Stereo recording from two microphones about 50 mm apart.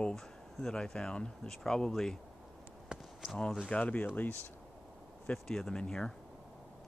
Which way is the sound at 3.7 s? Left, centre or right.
Left.